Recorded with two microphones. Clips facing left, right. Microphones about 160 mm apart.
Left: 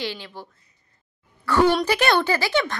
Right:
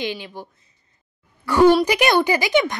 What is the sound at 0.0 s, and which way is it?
A woman's voice, 15° right (ahead or behind).